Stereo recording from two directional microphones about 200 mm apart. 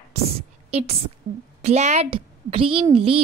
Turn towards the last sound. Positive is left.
turn(degrees=-30)  # may be behind; listen again after turning